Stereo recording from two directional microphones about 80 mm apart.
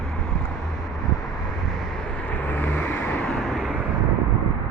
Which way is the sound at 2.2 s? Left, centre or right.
Left.